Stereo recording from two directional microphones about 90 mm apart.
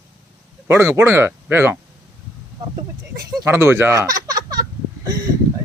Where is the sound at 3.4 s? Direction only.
30° right (ahead or behind); by 5.3 s 45° right (ahead or behind).